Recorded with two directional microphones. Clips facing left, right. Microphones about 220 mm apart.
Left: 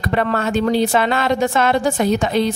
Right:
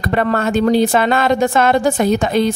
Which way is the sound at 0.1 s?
45° right (ahead or behind).